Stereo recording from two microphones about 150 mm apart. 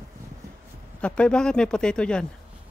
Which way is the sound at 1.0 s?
5° left (ahead or behind).